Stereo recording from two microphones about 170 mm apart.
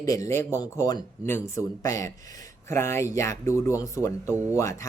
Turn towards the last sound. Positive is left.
turn(degrees=15)  # may be behind; listen again after turning